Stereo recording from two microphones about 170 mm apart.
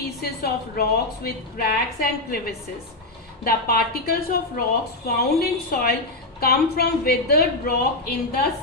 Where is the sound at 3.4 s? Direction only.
60° left (ahead or behind).